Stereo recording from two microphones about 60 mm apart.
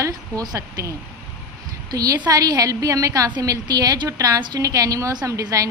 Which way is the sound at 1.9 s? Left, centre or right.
Right.